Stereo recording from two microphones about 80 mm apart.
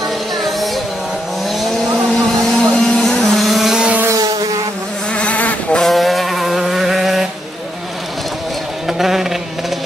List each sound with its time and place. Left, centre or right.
2.4 s vehicle: centre
5.1 s insect: centre
5.8 s vehicle: centre
8.8 s a sound: centre